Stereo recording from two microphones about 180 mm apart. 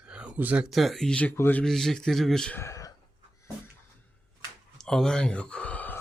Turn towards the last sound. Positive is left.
turn(degrees=10)  # may be behind; listen again after turning